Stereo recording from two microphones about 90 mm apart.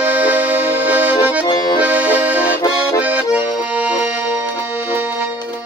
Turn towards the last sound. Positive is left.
turn(degrees=-15)  # may be behind; listen again after turning